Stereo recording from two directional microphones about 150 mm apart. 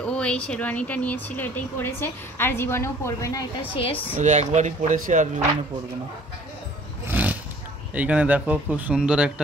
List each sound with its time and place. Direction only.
0.0 s speech: 5° left (ahead or behind)
3.7 s speech: 40° left (ahead or behind)
4.2 s speech: 50° right (ahead or behind)
7.1 s a sound: 10° right (ahead or behind)
7.9 s speech: 10° right (ahead or behind)